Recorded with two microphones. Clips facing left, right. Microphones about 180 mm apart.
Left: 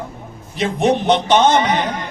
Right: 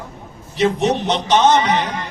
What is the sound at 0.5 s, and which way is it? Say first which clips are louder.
A man's voice: even; 55° left (ahead or behind).